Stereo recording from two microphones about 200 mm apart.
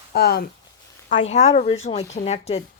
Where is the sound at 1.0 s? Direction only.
40° left (ahead or behind).